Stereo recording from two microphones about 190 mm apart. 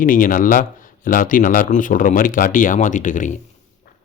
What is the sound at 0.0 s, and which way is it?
Speech, 45° left (ahead or behind).